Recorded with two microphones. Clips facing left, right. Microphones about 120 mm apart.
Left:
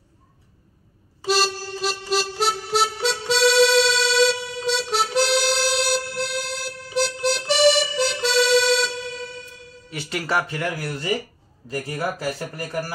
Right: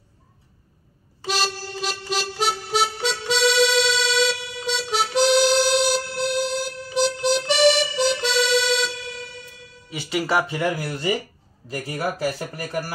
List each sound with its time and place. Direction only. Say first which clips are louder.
1.2 s music: left 4 dB; centre (ahead or behind)
8.3 s music: left 3 dB; 40° left (ahead or behind)
9.8 s speech: right 3 dB; 5° right (ahead or behind)